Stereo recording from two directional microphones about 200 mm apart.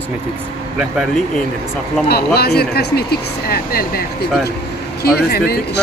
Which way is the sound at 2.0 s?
55° left (ahead or behind).